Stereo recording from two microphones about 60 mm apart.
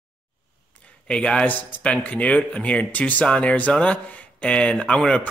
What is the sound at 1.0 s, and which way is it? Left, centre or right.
A man's voice, centre.